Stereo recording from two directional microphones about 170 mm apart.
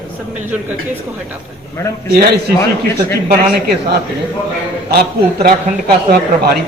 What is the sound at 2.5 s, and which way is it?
Speech, 15° left (ahead or behind).